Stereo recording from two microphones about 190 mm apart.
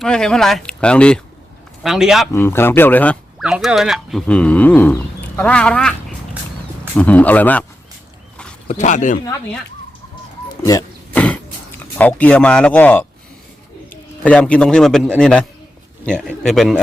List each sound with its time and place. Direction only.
0.0 s speech: 5° left (ahead or behind)
2.3 s speech: 10° left (ahead or behind)
3.4 s speech: 5° right (ahead or behind)
8.6 s speech: 40° left (ahead or behind)
10.6 s speech: 20° left (ahead or behind)
11.1 s cough: 5° left (ahead or behind)
11.8 s speech: 10° left (ahead or behind)
14.3 s speech: 5° left (ahead or behind)